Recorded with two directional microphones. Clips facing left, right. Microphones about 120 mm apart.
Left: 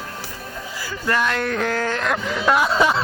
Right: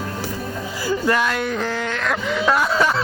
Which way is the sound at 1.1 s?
10° right (ahead or behind).